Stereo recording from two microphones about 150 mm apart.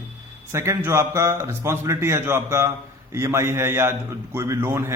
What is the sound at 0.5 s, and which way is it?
A man's voice, 20° right (ahead or behind).